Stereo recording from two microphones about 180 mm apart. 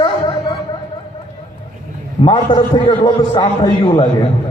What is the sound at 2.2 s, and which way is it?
A man's voice, 25° left (ahead or behind).